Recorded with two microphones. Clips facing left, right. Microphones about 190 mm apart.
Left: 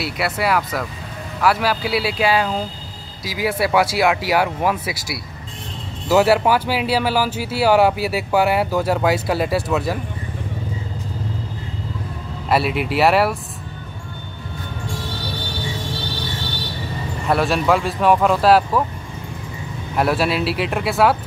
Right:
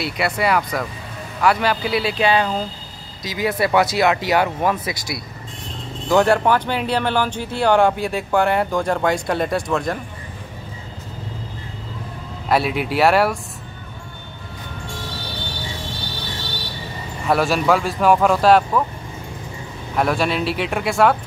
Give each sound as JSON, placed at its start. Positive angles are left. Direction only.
{"t": 0.0, "sound": "speech", "side_deg": 0}
{"t": 12.4, "sound": "speech", "side_deg": 0}
{"t": 17.3, "sound": "speech", "side_deg": 0}
{"t": 20.0, "sound": "speech", "side_deg": 5}